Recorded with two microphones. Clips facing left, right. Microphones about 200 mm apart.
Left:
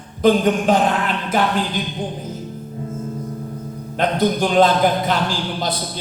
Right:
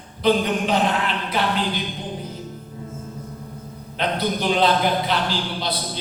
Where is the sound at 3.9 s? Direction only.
45° left (ahead or behind).